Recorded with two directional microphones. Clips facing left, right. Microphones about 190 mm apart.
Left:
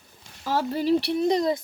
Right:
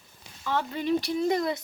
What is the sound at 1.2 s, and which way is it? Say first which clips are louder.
Speech: left 3 dB; 20° left (ahead or behind).